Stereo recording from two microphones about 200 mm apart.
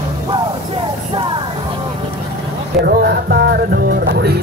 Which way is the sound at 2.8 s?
55° right (ahead or behind).